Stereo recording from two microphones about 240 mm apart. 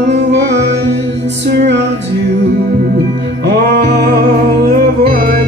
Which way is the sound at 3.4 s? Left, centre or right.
Right.